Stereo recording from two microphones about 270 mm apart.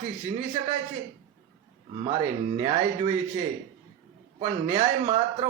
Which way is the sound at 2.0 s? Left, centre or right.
Right.